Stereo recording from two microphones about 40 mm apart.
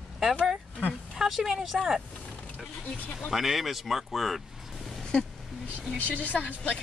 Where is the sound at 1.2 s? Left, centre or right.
Centre.